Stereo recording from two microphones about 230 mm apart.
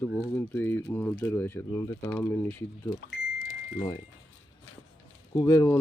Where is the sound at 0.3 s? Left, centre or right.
Centre.